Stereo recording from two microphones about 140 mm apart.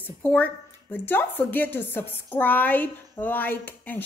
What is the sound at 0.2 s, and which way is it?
Speech, 10° left (ahead or behind).